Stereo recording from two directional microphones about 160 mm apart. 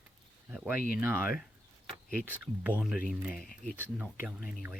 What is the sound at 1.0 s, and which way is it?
Speech, 15° right (ahead or behind).